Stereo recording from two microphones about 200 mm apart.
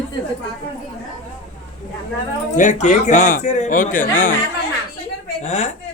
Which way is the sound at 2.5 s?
40° left (ahead or behind).